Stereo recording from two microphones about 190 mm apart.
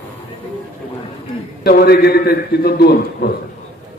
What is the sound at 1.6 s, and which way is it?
A man's voice, 60° left (ahead or behind).